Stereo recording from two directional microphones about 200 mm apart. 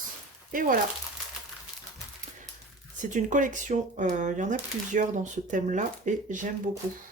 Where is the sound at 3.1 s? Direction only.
40° right (ahead or behind).